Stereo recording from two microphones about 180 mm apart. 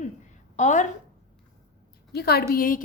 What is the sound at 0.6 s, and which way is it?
Speech, 40° left (ahead or behind).